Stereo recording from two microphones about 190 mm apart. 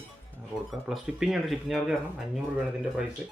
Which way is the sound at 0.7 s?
Centre (ahead or behind).